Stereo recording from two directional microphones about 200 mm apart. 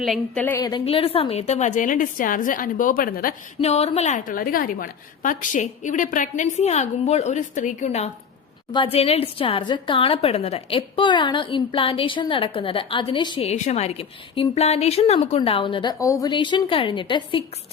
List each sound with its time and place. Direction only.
0.0 s a woman's voice: 5° left (ahead or behind)
0.7 s a woman's voice: 30° left (ahead or behind); by 3.3 s 45° left (ahead or behind)
3.6 s a woman's voice: 30° left (ahead or behind)